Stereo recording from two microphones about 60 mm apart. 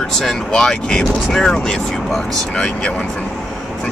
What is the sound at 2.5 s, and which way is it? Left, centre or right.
Speech, centre.